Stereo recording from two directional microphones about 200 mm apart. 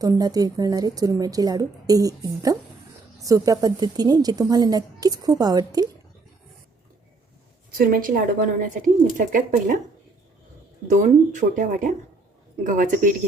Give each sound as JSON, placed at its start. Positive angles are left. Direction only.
{"t": 0.0, "sound": "a woman's voice", "side_deg": -20}
{"t": 7.8, "sound": "a woman's voice", "side_deg": -45}
{"t": 10.8, "sound": "speech", "side_deg": -40}